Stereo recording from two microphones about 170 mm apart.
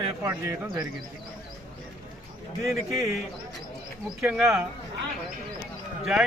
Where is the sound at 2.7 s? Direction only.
Centre (ahead or behind).